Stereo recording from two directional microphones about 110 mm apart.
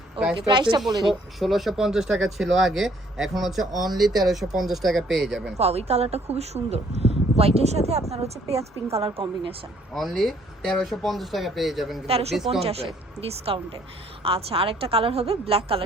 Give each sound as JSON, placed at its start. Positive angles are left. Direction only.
{"t": 0.3, "sound": "speech", "side_deg": -45}
{"t": 1.4, "sound": "speech", "side_deg": 0}
{"t": 5.5, "sound": "speech", "side_deg": -70}
{"t": 9.0, "sound": "speech", "side_deg": -50}
{"t": 9.9, "sound": "speech", "side_deg": 0}
{"t": 12.0, "sound": "a woman's voice", "side_deg": -65}